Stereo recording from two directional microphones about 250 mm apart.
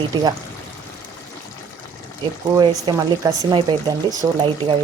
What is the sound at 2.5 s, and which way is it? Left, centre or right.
Speech, centre.